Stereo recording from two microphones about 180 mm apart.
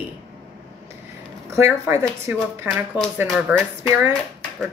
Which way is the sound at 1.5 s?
15° right (ahead or behind).